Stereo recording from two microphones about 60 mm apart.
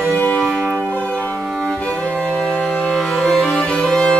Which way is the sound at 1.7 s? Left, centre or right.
Centre.